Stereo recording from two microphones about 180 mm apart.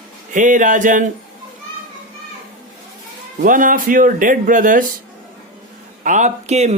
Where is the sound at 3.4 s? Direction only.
50° right (ahead or behind).